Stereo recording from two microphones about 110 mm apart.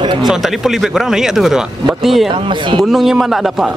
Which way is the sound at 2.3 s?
50° right (ahead or behind).